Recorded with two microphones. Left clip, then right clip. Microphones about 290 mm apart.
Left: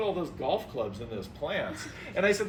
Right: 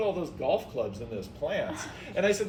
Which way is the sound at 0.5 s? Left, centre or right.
Centre.